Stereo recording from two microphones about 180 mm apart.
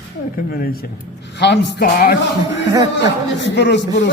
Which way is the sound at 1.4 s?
70° left (ahead or behind).